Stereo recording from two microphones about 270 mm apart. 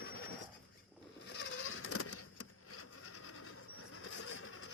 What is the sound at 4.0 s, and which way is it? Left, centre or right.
Vehicle, left.